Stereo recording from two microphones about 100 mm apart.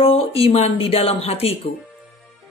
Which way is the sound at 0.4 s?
85° left.